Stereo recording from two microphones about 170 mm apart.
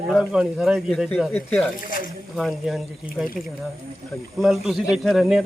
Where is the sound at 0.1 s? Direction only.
Centre (ahead or behind).